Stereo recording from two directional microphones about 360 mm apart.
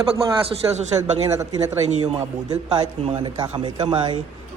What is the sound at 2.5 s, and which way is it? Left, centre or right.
A man's voice, centre.